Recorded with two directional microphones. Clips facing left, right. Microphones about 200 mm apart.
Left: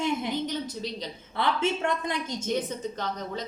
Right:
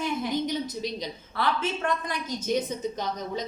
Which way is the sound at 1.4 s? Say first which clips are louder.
Left 1 dB; 25° left (ahead or behind).